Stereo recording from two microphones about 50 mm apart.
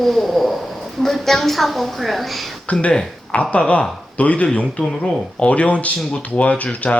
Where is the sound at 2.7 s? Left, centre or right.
Left.